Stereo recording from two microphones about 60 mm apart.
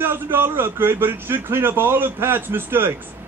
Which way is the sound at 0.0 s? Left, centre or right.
Right.